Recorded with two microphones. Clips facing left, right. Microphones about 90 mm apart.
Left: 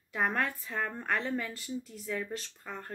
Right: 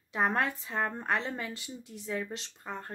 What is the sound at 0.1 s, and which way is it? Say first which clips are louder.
A woman's voice: right 2 dB; 20° right (ahead or behind).